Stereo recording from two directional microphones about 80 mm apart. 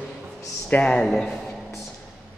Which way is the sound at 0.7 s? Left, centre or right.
Centre.